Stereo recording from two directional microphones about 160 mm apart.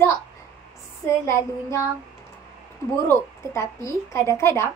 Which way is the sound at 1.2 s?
15° left (ahead or behind).